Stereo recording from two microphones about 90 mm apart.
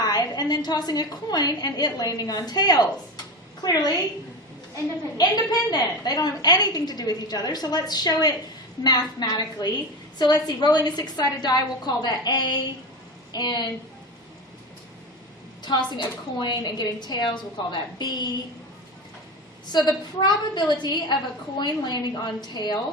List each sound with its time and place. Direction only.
0.0 s a woman's voice: 45° left (ahead or behind)
15.6 s a woman's voice: 55° left (ahead or behind)
19.7 s a woman's voice: 55° left (ahead or behind)